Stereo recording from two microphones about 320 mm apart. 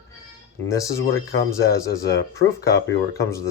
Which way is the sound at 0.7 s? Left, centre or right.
Centre.